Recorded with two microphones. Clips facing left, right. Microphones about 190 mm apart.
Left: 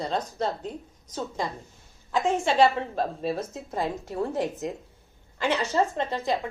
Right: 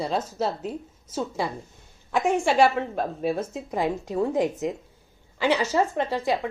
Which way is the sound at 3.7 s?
15° right (ahead or behind).